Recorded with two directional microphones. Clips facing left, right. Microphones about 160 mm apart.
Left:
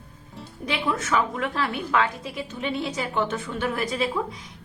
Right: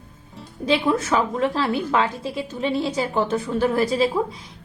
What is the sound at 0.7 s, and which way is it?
A woman's voice, 30° right (ahead or behind).